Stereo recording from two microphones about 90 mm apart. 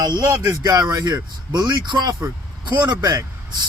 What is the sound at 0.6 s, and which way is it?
Speech, 45° right (ahead or behind).